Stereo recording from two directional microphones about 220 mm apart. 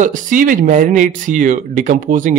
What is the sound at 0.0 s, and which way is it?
Speech, 35° right (ahead or behind).